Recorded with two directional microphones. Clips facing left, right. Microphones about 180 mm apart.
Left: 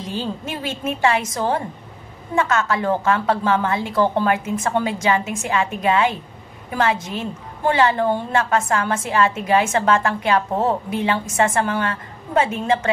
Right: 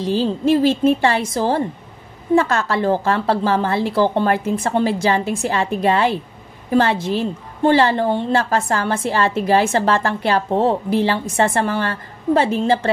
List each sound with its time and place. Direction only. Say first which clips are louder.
0.0 s a woman's voice: right 9 dB; 30° right (ahead or behind)